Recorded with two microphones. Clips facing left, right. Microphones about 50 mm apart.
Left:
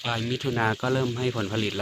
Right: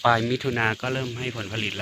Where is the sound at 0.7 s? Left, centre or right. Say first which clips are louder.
Left 3 dB; right.